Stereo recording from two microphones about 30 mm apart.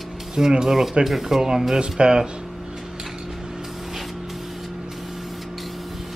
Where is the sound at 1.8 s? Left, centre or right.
Right.